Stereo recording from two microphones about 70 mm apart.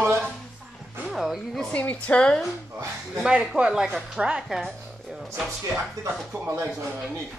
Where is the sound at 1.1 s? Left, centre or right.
Centre.